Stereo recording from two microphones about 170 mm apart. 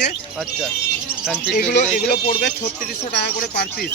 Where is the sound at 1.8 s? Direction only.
45° left (ahead or behind).